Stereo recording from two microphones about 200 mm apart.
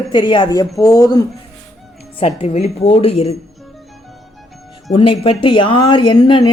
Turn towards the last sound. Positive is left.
turn(degrees=25)  # may be behind; listen again after turning